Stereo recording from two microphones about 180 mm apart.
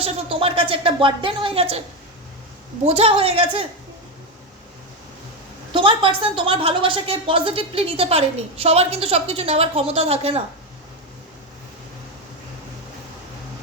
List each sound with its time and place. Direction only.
0.0 s speech: 30° right (ahead or behind)
2.8 s a woman's voice: 35° right (ahead or behind)
5.7 s a woman's voice: 30° right (ahead or behind)